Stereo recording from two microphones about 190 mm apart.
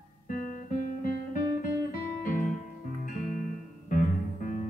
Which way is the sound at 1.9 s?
45° left (ahead or behind).